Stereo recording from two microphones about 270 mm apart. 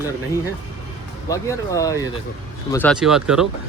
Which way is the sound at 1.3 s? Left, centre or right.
Centre.